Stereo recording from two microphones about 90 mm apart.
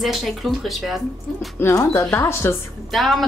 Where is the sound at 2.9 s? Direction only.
Centre (ahead or behind).